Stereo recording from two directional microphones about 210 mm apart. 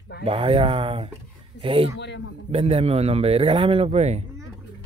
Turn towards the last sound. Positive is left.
turn(degrees=-30)  # may be behind; listen again after turning